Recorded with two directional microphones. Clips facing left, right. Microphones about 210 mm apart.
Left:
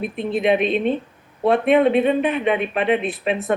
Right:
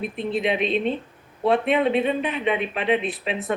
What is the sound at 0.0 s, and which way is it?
Speech, 55° left (ahead or behind).